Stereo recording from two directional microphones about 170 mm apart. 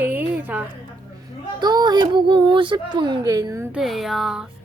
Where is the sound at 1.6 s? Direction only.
25° right (ahead or behind).